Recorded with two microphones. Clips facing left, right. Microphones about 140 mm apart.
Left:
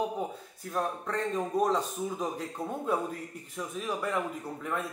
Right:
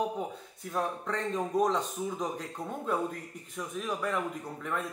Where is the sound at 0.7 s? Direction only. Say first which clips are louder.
Left 1 dB; centre (ahead or behind).